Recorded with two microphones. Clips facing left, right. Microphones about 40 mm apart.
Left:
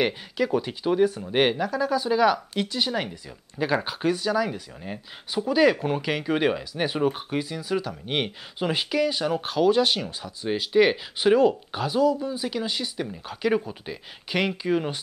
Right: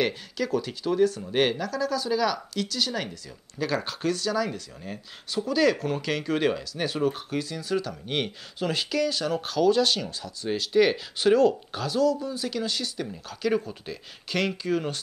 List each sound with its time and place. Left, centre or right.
0.0 s speech: centre